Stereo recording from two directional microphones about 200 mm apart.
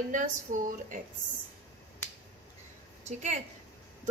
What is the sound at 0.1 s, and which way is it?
Speech, 40° right (ahead or behind).